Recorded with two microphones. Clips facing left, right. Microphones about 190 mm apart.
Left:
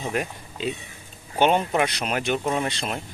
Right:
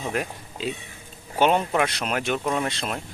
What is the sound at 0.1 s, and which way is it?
Speech, centre (ahead or behind).